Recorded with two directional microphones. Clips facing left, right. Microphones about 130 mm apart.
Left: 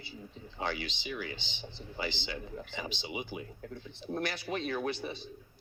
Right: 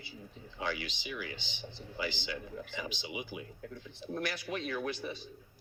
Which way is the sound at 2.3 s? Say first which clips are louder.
Even; 25° left (ahead or behind).